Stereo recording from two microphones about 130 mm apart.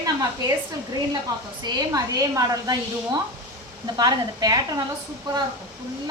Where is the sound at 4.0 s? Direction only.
30° right (ahead or behind).